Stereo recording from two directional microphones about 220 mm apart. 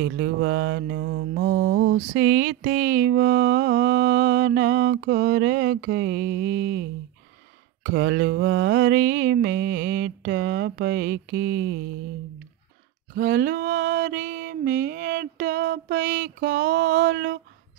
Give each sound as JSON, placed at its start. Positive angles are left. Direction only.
{"t": 0.0, "sound": "mantra", "side_deg": -50}
{"t": 7.8, "sound": "mantra", "side_deg": -50}
{"t": 13.1, "sound": "mantra", "side_deg": -45}